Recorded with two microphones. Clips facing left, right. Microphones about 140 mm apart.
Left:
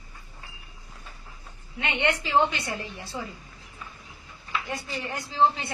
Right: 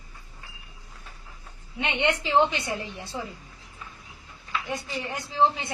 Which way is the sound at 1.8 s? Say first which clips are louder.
Right 1 dB; 20° right (ahead or behind).